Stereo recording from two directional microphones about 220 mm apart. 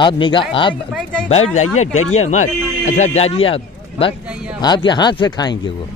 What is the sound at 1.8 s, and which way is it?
Speech, 30° left (ahead or behind).